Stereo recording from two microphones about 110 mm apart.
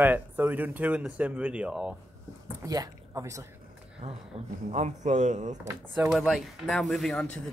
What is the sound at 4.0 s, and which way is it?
Speech, 80° right.